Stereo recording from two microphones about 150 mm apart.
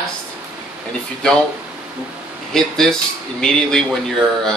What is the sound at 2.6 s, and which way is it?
Speech, 5° left (ahead or behind).